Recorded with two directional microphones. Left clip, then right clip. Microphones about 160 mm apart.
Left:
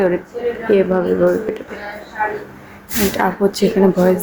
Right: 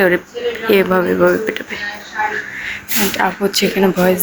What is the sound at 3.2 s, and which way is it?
Speech, 15° left (ahead or behind).